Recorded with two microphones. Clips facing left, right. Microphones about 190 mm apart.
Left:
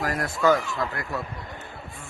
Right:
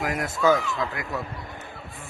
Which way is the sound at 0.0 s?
20° right (ahead or behind).